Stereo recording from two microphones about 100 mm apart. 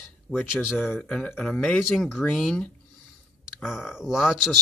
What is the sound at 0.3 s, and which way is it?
Speech, 20° left (ahead or behind).